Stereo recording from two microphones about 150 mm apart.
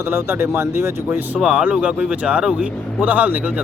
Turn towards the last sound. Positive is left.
turn(degrees=-10)  # may be behind; listen again after turning